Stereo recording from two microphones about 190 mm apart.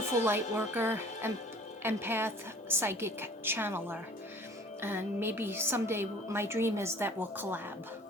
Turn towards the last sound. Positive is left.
turn(degrees=-10)  # may be behind; listen again after turning